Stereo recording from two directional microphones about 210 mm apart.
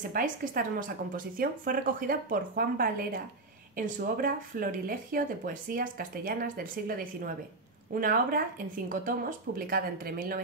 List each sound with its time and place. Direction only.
0.1 s speech: 40° right (ahead or behind)